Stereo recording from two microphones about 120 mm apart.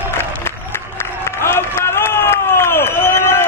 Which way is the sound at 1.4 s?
20° left (ahead or behind).